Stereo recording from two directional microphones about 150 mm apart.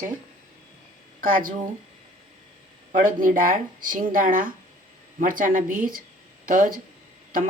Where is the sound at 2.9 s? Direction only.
65° right (ahead or behind).